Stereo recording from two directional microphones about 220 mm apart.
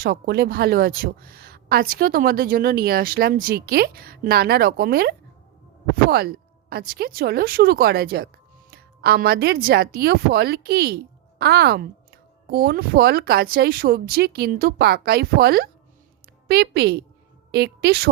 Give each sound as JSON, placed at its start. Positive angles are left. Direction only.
{"t": 0.0, "sound": "a woman's voice", "side_deg": -45}